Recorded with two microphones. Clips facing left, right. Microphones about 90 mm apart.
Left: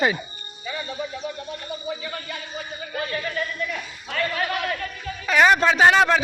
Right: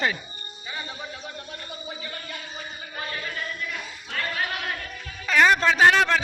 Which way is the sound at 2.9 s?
90° left.